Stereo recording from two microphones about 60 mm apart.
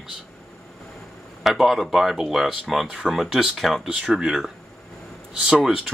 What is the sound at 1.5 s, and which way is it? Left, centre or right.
Speech, centre.